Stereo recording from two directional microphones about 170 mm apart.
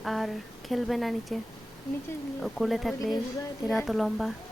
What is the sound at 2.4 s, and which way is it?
Speech, centre (ahead or behind).